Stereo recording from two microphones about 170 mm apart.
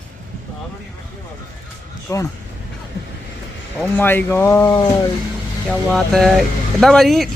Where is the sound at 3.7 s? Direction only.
10° left (ahead or behind).